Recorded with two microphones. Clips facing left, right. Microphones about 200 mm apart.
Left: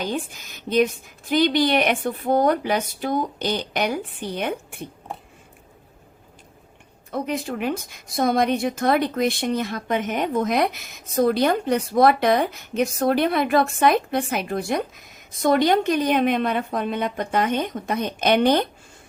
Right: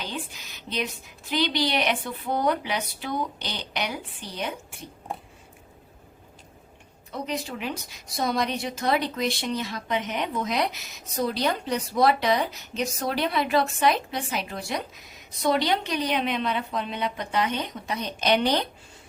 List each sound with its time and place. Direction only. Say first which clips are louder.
0.0 s a woman's voice: left 8 dB; 50° left (ahead or behind)
7.1 s a woman's voice: left 5 dB; 55° left (ahead or behind)